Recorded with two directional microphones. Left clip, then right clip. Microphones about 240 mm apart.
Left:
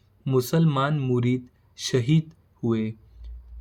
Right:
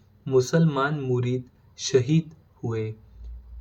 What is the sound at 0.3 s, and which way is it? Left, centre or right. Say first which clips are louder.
Speech: right 2 dB; left.